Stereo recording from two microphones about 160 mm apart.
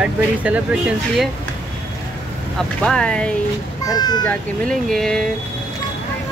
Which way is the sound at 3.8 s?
25° left (ahead or behind).